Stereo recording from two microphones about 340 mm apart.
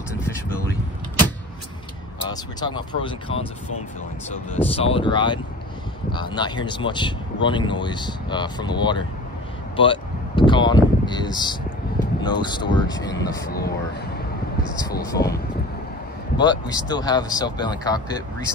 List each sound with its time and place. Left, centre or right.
2.2 s speech: centre
4.6 s speech: centre
9.8 s a sound: centre
12.2 s speech: centre
13.5 s speech: left
14.8 s speech: centre